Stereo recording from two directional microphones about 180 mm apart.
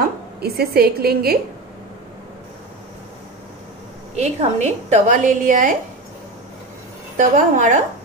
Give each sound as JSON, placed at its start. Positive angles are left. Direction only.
{"t": 0.0, "sound": "a woman's voice", "side_deg": -60}
{"t": 4.1, "sound": "a woman's voice", "side_deg": -40}
{"t": 7.2, "sound": "a woman's voice", "side_deg": -45}